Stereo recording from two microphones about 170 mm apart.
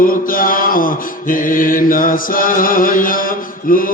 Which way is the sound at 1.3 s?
55° left (ahead or behind).